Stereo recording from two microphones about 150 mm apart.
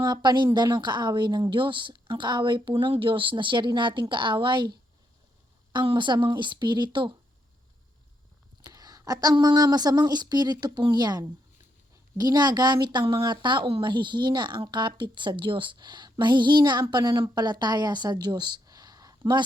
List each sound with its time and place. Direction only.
0.0 s a woman's voice: 30° right (ahead or behind)
5.7 s a woman's voice: 30° right (ahead or behind)
8.7 s speech: 25° right (ahead or behind)